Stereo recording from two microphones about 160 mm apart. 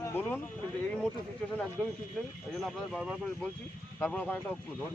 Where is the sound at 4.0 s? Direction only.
10° left (ahead or behind).